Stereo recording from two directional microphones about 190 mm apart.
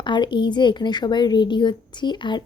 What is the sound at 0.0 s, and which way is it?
Speech, 25° left (ahead or behind).